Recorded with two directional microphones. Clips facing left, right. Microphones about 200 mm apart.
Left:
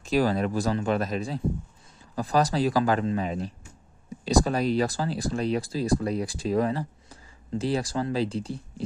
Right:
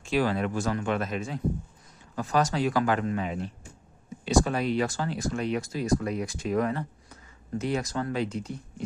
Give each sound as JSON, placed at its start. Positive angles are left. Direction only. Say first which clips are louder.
{"t": 0.0, "sound": "speech", "louder": "left 2 dB", "side_deg": 40}